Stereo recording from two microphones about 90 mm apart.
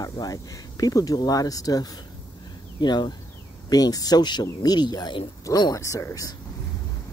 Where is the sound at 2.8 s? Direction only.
55° left (ahead or behind).